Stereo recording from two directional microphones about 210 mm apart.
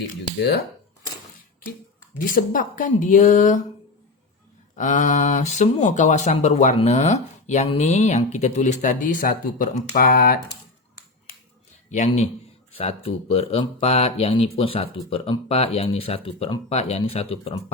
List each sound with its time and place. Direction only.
0.3 s speech: 50° left (ahead or behind)
2.1 s speech: 40° left (ahead or behind)
4.8 s speech: 35° left (ahead or behind)
11.9 s speech: 35° left (ahead or behind)